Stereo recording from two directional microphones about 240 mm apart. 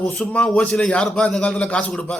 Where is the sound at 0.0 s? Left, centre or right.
Centre.